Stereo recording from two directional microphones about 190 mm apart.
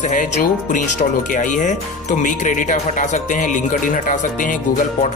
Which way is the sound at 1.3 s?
40° left (ahead or behind).